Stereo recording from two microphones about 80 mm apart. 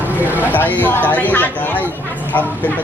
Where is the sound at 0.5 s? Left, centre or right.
Left.